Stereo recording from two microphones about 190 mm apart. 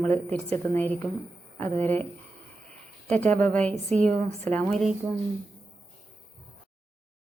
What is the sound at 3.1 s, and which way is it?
A woman's voice, 10° left (ahead or behind).